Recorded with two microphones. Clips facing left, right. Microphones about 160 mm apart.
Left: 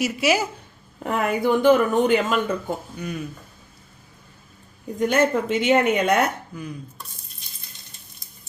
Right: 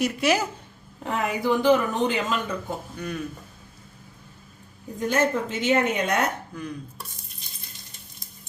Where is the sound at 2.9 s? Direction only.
10° left (ahead or behind).